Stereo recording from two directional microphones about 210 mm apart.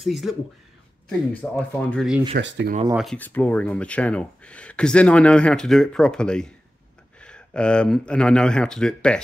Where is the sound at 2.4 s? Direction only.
60° right (ahead or behind).